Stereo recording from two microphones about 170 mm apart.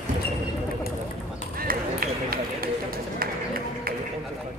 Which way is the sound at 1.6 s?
60° right (ahead or behind).